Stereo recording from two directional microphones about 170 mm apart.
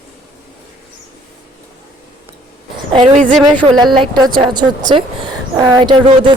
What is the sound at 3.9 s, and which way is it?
Speech, 25° right (ahead or behind).